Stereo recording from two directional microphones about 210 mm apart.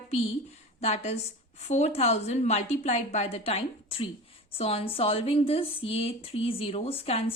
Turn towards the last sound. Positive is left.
turn(degrees=25)  # may be behind; listen again after turning